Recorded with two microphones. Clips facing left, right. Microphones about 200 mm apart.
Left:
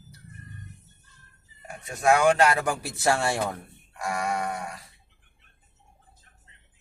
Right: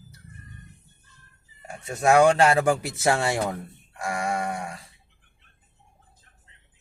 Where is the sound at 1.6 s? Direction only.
30° right (ahead or behind).